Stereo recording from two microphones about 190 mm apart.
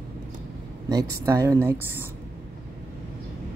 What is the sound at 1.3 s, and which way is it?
Speech, 15° right (ahead or behind).